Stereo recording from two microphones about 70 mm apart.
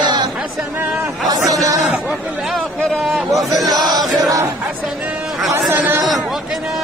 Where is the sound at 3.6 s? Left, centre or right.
Right.